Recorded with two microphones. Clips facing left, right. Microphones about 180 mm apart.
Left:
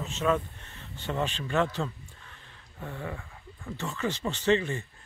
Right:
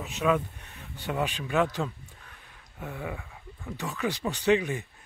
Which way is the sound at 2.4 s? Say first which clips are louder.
Right 1 dB; 10° right (ahead or behind).